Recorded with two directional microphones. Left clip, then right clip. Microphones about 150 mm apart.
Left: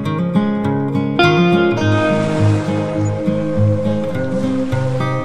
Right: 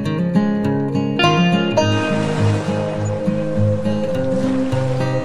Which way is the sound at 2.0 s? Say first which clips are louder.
Left 4 dB; centre (ahead or behind).